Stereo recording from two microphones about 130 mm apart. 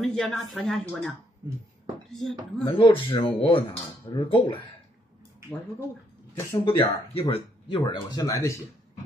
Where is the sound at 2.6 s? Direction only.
40° left (ahead or behind).